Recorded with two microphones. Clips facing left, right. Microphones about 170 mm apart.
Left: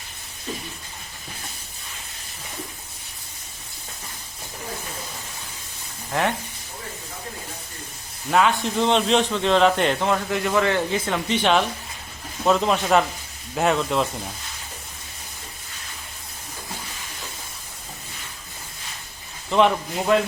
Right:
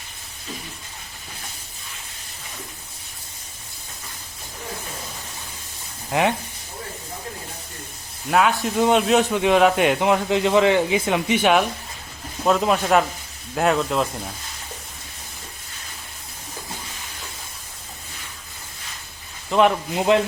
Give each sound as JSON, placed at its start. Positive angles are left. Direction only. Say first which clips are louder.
{"t": 6.1, "sound": "speech", "louder": "right 3 dB", "side_deg": -15}
{"t": 8.3, "sound": "a man's voice", "louder": "right 1 dB", "side_deg": -5}
{"t": 19.5, "sound": "speech", "louder": "right 1 dB", "side_deg": -5}
{"t": 20.1, "sound": "speech", "louder": "right 2 dB", "side_deg": -20}